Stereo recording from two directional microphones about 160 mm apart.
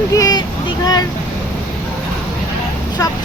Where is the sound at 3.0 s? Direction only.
20° left (ahead or behind).